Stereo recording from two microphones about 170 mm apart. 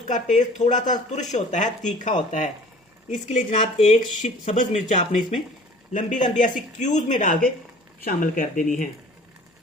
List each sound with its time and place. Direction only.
0.3 s speech: 45° left (ahead or behind)